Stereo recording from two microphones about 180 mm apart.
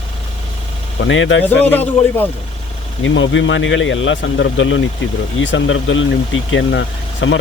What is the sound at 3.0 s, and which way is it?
Speech, 90° left.